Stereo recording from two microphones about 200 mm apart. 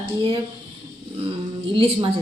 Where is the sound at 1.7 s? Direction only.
25° right (ahead or behind).